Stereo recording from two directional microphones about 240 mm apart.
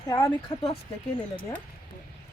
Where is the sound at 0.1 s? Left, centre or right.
Centre.